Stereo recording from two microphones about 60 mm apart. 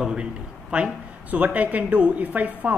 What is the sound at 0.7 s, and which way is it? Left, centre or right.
A woman's voice, right.